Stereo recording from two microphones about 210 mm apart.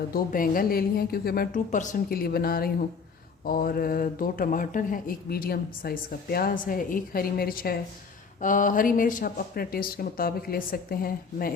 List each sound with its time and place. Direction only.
0.1 s speech: 40° left (ahead or behind)